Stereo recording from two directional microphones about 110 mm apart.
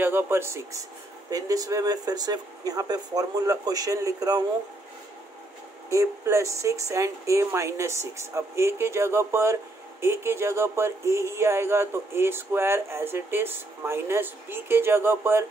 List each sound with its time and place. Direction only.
0.0 s speech: 20° right (ahead or behind)
5.9 s speech: 25° right (ahead or behind)